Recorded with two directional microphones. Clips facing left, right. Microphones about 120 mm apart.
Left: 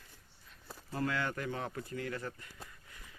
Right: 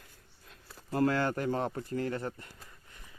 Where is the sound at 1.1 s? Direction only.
40° right (ahead or behind).